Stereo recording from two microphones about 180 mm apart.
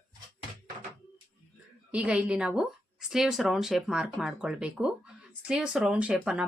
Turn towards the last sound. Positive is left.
turn(degrees=-5)  # may be behind; listen again after turning